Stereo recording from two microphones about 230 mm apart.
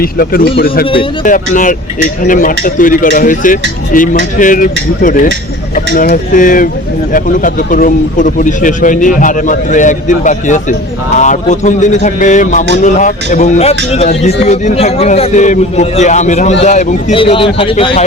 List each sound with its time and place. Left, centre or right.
0.0 s speech: left